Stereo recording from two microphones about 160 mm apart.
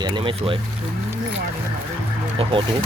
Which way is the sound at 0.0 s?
35° right (ahead or behind).